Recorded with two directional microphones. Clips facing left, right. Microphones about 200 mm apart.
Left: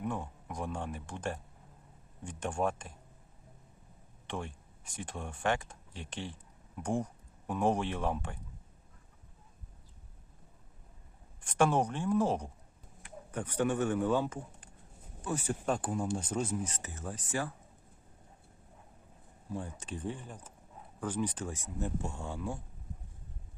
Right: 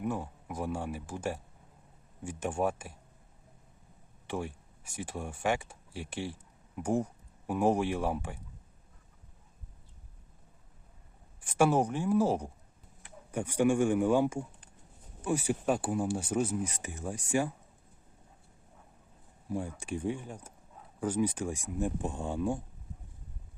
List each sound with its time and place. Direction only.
0.0 s speech: 5° right (ahead or behind)
4.3 s speech: 10° right (ahead or behind)
11.3 s speech: 10° right (ahead or behind)
19.5 s speech: 10° right (ahead or behind)